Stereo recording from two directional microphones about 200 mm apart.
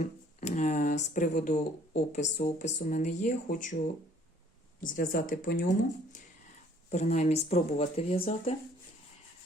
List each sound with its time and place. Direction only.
0.0 s a sound: 35° left (ahead or behind)
1.0 s speech: 40° left (ahead or behind)
6.9 s speech: 35° left (ahead or behind)